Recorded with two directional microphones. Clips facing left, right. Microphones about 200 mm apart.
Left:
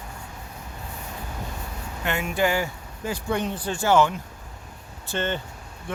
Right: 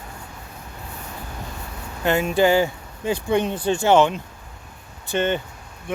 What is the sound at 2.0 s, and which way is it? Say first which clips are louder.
Speech: right 6 dB; 35° right (ahead or behind).